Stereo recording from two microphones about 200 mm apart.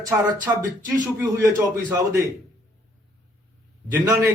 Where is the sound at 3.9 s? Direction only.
15° right (ahead or behind).